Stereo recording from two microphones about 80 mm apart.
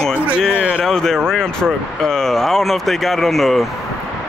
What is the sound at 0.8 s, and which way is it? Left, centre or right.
Speech, centre.